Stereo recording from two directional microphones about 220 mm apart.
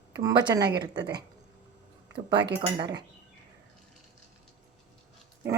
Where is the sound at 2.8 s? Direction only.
20° right (ahead or behind).